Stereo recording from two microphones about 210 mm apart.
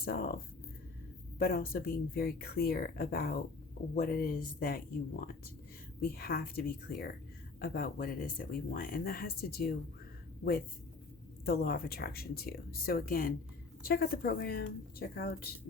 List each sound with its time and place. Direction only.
0.0 s speech: 45° left (ahead or behind)
1.4 s speech: 45° left (ahead or behind)
6.0 s speech: 50° left (ahead or behind)
11.4 s speech: 50° left (ahead or behind)